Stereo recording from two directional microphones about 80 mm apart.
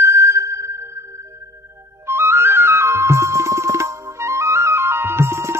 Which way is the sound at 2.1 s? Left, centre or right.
Right.